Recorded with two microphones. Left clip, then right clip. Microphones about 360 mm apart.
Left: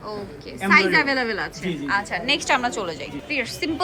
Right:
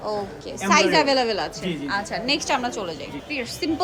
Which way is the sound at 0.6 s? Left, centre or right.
Centre.